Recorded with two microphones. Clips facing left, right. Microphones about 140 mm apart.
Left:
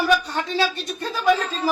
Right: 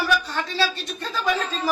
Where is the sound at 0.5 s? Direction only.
15° left (ahead or behind).